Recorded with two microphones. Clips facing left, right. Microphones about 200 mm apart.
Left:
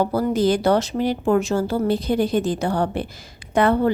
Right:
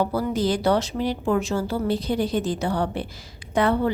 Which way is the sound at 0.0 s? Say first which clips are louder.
Left 4 dB; 45° left (ahead or behind).